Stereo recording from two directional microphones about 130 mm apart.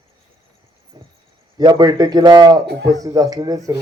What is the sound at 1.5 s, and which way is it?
A man's voice, 35° right (ahead or behind).